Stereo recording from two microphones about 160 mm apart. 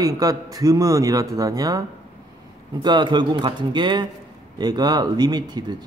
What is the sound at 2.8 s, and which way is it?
A man's voice, 30° right (ahead or behind).